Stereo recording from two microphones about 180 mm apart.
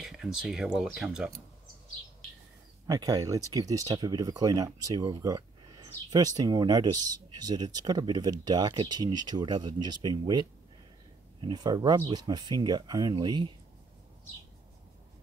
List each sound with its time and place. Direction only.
0.0 s speech: centre (ahead or behind)
2.9 s speech: 20° right (ahead or behind)
11.4 s speech: 25° right (ahead or behind)